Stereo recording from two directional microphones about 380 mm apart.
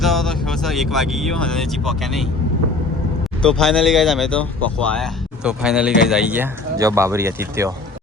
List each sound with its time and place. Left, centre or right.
0.0 s speech: centre
3.4 s speech: centre